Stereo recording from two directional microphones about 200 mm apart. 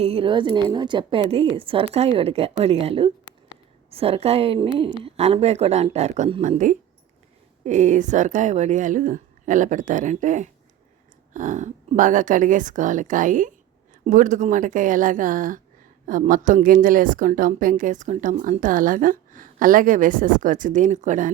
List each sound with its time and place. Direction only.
0.0 s a woman's voice: 30° right (ahead or behind)